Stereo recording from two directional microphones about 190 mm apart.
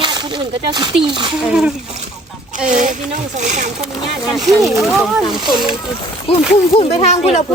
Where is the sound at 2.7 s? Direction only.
40° right (ahead or behind).